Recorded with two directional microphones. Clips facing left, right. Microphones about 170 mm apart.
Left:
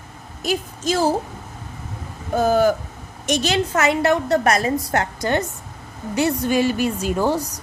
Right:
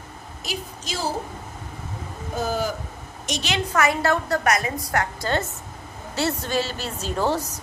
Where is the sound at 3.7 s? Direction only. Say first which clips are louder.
Left 2 dB; 20° left (ahead or behind).